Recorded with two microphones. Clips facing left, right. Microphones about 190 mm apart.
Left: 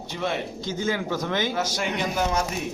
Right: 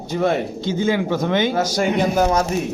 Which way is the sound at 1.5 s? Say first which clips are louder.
Right 8 dB; 45° right (ahead or behind).